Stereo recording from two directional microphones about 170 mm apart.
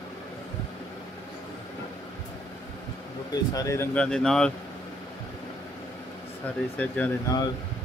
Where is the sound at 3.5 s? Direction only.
15° left (ahead or behind).